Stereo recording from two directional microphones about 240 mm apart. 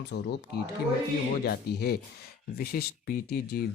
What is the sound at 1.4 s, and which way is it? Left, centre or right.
Speech, left.